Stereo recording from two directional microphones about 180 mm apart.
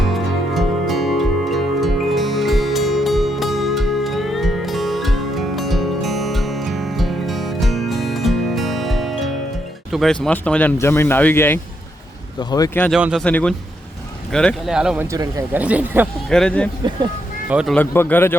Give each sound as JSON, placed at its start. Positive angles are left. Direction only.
{"t": 0.0, "sound": "music", "side_deg": 0}
{"t": 10.2, "sound": "speech", "side_deg": 5}
{"t": 13.0, "sound": "speech", "side_deg": -5}
{"t": 13.2, "sound": "speech", "side_deg": 5}
{"t": 15.0, "sound": "speech", "side_deg": -15}
{"t": 16.3, "sound": "speech", "side_deg": 5}
{"t": 17.7, "sound": "speech", "side_deg": 10}